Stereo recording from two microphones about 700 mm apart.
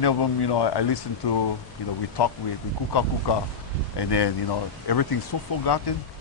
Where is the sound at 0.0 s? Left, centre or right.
Left.